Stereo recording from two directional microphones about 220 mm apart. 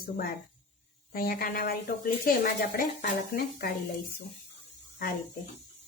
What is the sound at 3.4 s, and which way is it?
Speech, 40° left (ahead or behind).